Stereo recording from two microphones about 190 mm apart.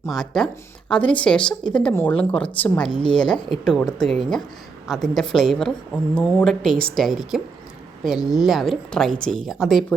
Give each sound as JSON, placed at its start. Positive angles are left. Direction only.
{"t": 0.1, "sound": "speech", "side_deg": 0}
{"t": 2.9, "sound": "a woman's voice", "side_deg": 25}
{"t": 3.2, "sound": "speech", "side_deg": 5}
{"t": 8.4, "sound": "speech", "side_deg": 0}